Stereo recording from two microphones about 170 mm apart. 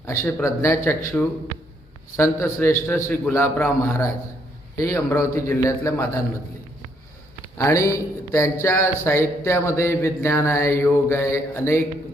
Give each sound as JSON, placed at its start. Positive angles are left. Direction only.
{"t": 0.0, "sound": "speech", "side_deg": 15}
{"t": 7.6, "sound": "speech", "side_deg": 20}